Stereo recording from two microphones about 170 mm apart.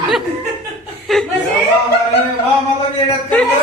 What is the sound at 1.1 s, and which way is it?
Speech, centre (ahead or behind).